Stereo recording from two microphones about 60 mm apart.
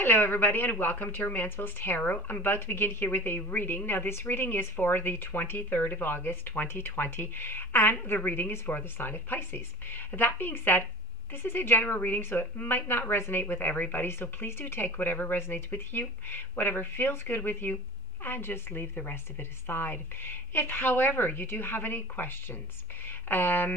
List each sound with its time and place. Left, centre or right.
0.0 s speech: left